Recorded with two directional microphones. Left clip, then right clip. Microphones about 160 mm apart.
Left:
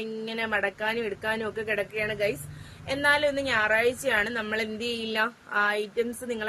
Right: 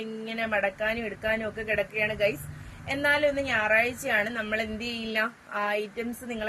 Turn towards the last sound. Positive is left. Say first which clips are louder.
# left 5 dB
turn(degrees=30)  # may be behind; listen again after turning